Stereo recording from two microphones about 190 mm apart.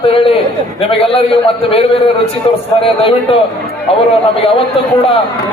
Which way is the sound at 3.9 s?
30° left (ahead or behind).